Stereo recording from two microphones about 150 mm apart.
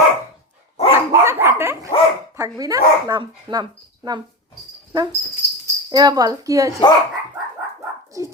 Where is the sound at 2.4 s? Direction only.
25° right (ahead or behind).